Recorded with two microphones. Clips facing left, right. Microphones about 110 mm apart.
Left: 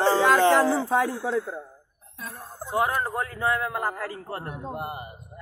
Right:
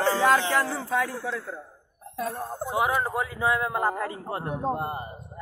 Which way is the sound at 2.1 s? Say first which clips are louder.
Right 9 dB; 70° right (ahead or behind).